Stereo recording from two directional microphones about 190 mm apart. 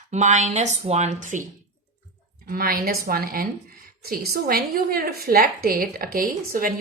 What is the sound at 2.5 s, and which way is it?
A woman's voice, 50° right (ahead or behind).